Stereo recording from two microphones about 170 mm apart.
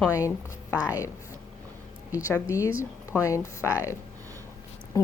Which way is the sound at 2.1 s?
20° left (ahead or behind).